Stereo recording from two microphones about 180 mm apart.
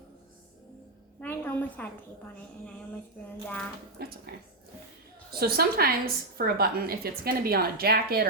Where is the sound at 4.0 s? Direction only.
60° right (ahead or behind).